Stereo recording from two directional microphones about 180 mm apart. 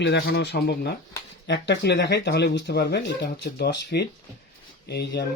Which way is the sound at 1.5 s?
75° left (ahead or behind).